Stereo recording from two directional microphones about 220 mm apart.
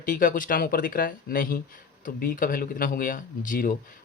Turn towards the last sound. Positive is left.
turn(degrees=40)  # may be behind; listen again after turning